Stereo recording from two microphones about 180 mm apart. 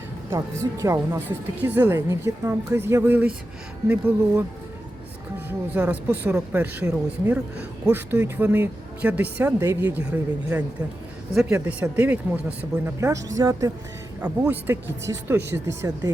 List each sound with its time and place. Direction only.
0.3 s speech: 15° right (ahead or behind)
5.5 s speech: 10° right (ahead or behind)